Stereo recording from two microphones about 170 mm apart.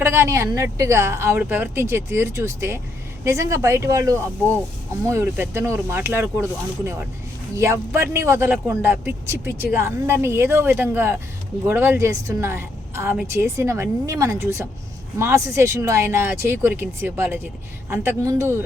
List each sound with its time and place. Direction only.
0.0 s a woman's voice: 15° right (ahead or behind)